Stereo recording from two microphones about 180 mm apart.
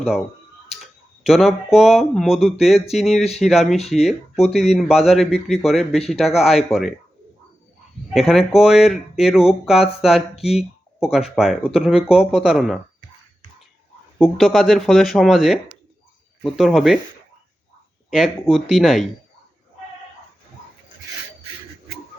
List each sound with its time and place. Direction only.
1.2 s speech: centre (ahead or behind)
8.1 s speech: centre (ahead or behind)
14.3 s speech: centre (ahead or behind)
18.5 s speech: centre (ahead or behind)